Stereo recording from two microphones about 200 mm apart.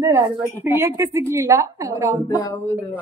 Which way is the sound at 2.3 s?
15° left (ahead or behind).